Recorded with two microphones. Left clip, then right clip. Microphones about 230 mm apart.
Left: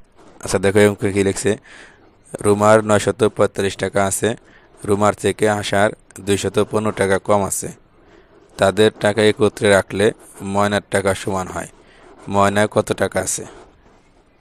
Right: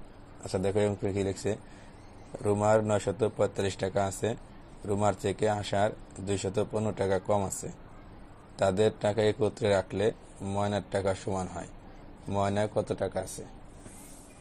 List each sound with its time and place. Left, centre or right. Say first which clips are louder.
0.4 s speech: left 14 dB; left
2.4 s speech: left 13 dB; left
8.5 s speech: left 12 dB; left